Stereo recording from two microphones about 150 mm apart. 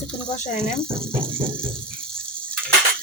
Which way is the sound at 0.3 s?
55° left (ahead or behind).